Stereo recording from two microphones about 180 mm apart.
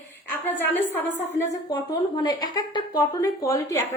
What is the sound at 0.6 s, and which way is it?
Speech, 10° left (ahead or behind).